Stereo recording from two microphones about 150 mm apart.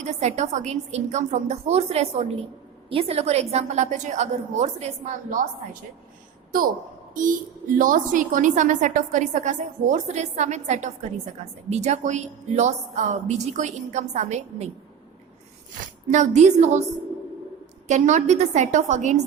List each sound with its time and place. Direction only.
0.0 s a woman's voice: 50° right (ahead or behind)
7.1 s a woman's voice: 60° right (ahead or behind)
16.1 s a woman's voice: 50° right (ahead or behind)
17.8 s a woman's voice: 50° right (ahead or behind)